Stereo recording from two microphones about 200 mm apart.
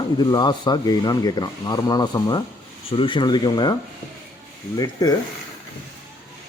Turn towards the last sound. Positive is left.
turn(degrees=20)  # may be behind; listen again after turning